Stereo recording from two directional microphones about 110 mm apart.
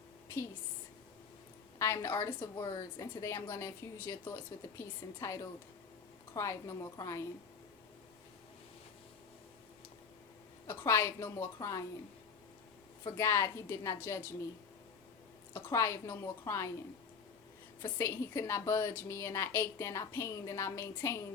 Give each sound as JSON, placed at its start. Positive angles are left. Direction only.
{"t": 1.8, "sound": "a woman's voice", "side_deg": 25}
{"t": 10.7, "sound": "a woman's voice", "side_deg": 20}
{"t": 13.1, "sound": "a woman's voice", "side_deg": 25}
{"t": 15.5, "sound": "a woman's voice", "side_deg": 25}
{"t": 17.8, "sound": "a woman's voice", "side_deg": 25}